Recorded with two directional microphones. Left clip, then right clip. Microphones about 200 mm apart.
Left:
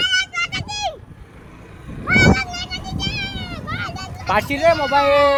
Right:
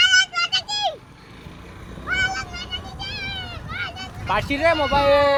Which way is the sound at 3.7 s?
50° left (ahead or behind).